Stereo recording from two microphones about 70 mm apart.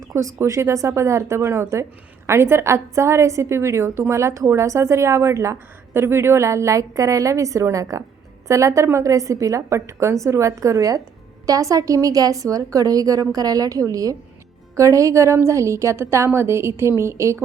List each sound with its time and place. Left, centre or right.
0.4 s a woman's voice: right